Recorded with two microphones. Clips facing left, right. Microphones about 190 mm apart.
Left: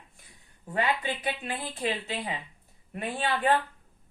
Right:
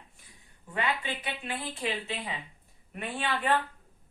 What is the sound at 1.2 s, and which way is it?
A woman's voice, 35° left (ahead or behind).